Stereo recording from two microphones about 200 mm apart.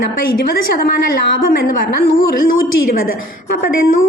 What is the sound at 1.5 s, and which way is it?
Speech, 45° left (ahead or behind).